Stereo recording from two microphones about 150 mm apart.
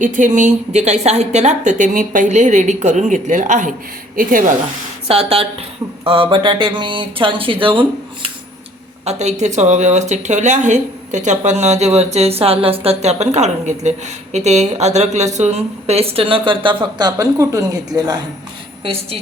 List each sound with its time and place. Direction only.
0.0 s a woman's voice: 60° right (ahead or behind)
5.0 s speech: 40° right (ahead or behind)
9.0 s speech: 50° right (ahead or behind); by 18.2 s 25° right (ahead or behind)